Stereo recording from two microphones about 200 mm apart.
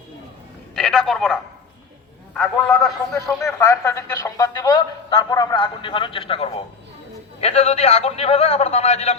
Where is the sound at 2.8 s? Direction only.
Centre (ahead or behind).